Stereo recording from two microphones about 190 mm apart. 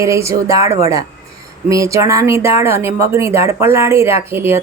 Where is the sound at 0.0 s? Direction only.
15° right (ahead or behind).